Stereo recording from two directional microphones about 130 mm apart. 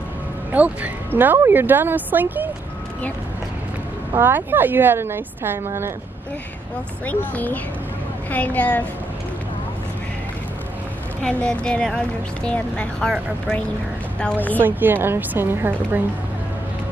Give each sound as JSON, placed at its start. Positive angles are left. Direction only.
{"t": 0.5, "sound": "speech", "side_deg": -10}
{"t": 4.1, "sound": "speech", "side_deg": -15}
{"t": 7.1, "sound": "speech", "side_deg": 10}
{"t": 11.2, "sound": "speech", "side_deg": 5}
{"t": 14.6, "sound": "speech", "side_deg": -15}